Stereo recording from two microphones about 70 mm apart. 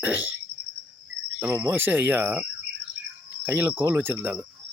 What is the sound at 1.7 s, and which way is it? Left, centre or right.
Speech, right.